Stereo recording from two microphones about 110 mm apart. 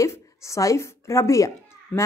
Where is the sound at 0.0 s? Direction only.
30° left (ahead or behind).